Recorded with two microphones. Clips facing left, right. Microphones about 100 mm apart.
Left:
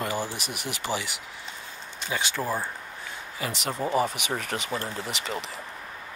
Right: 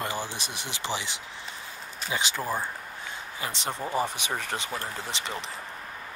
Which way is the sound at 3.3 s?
25° right (ahead or behind).